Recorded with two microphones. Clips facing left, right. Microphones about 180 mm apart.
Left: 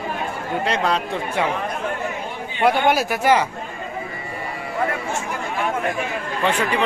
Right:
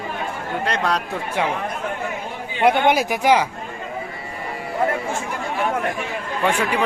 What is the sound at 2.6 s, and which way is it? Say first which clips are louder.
Speech: right 1 dB; 20° right (ahead or behind).